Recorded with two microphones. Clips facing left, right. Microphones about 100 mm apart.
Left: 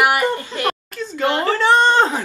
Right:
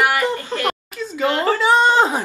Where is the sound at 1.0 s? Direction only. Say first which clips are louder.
Even; 5° right (ahead or behind).